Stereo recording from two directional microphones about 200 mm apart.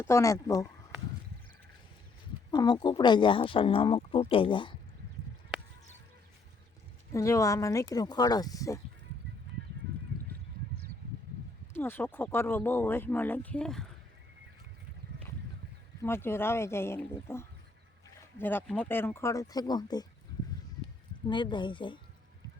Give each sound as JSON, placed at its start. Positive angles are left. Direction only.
{"t": 0.0, "sound": "speech", "side_deg": 15}
{"t": 2.5, "sound": "speech", "side_deg": 20}
{"t": 7.1, "sound": "speech", "side_deg": 15}
{"t": 11.7, "sound": "speech", "side_deg": 10}
{"t": 16.0, "sound": "speech", "side_deg": 10}
{"t": 21.2, "sound": "speech", "side_deg": 25}